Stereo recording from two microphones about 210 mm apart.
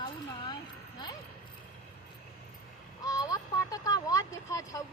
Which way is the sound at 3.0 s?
15° left (ahead or behind).